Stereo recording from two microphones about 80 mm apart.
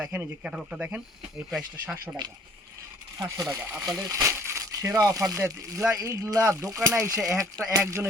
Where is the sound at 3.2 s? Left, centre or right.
Right.